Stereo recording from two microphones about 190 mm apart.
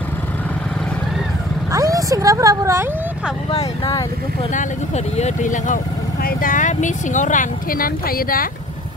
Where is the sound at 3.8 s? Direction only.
20° left (ahead or behind).